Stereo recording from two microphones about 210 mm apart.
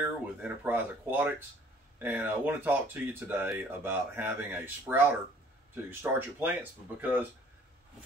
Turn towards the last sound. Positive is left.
turn(degrees=-10)  # may be behind; listen again after turning